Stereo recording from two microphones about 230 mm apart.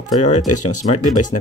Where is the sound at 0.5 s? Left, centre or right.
Left.